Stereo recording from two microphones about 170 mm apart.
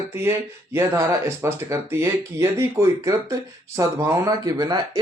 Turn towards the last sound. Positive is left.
turn(degrees=-20)  # may be behind; listen again after turning